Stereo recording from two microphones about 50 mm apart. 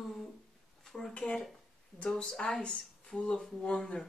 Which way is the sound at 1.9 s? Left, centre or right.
Centre.